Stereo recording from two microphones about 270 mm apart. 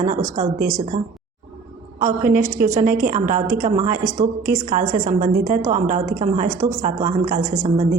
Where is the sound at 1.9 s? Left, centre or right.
Right.